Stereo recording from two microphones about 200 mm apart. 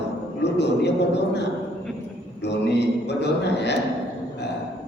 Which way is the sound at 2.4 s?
60° left (ahead or behind).